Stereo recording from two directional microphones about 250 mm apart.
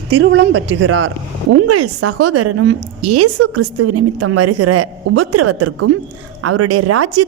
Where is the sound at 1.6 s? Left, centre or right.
Right.